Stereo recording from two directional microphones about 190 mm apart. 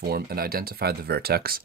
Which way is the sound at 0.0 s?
55° right (ahead or behind).